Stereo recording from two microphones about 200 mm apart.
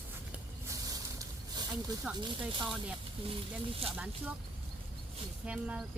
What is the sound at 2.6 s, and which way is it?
Speech, centre (ahead or behind).